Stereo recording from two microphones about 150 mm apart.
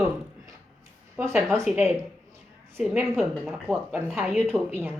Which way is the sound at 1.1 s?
15° right (ahead or behind).